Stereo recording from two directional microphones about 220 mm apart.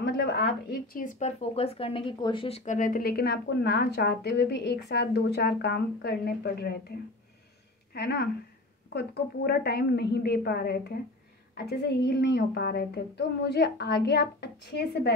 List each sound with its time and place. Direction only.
0.0 s speech: 50° left (ahead or behind)
7.9 s a woman's voice: 50° left (ahead or behind)